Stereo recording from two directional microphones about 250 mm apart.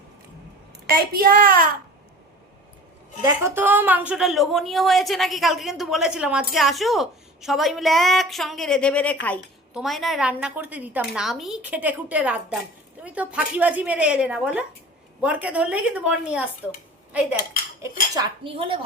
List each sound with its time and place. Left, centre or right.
1.1 s a child's voice: right
3.2 s a woman's voice: centre
17.1 s cutlery: centre
17.8 s dishes: centre